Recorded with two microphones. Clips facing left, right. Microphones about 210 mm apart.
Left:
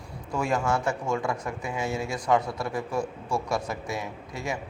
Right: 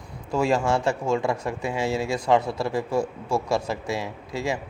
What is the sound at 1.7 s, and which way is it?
Speech, 90° right.